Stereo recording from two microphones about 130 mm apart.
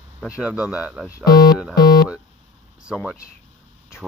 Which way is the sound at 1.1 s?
30° left (ahead or behind).